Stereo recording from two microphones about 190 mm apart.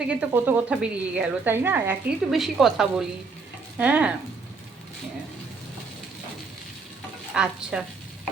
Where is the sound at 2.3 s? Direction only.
Centre (ahead or behind).